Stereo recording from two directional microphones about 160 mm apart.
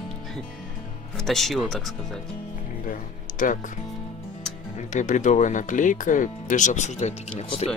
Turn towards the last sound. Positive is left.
turn(degrees=40)  # may be behind; listen again after turning